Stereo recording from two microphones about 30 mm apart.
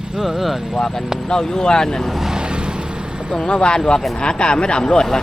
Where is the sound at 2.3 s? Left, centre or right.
Right.